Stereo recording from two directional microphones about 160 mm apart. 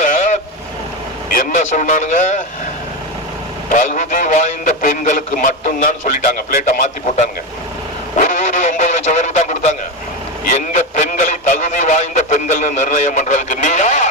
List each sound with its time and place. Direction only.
0.0 s vehicle: 50° left (ahead or behind)
1.4 s a man's voice: 55° left (ahead or behind)
3.7 s a man's voice: 50° left (ahead or behind)
8.2 s radio: 50° left (ahead or behind)